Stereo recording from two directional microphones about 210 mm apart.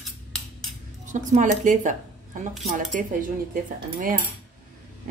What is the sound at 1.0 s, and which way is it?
A woman's voice, 35° right (ahead or behind).